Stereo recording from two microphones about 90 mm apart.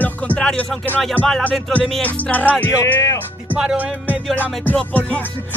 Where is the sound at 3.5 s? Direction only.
10° right (ahead or behind).